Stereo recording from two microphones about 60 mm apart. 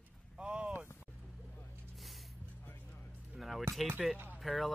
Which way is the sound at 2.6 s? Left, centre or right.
Left.